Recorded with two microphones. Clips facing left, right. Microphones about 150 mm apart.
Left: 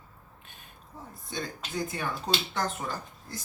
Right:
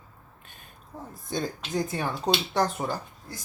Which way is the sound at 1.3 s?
40° right (ahead or behind).